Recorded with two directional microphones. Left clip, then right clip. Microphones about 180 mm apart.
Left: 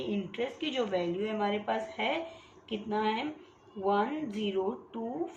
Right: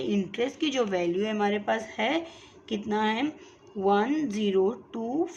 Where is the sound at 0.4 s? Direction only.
50° right (ahead or behind).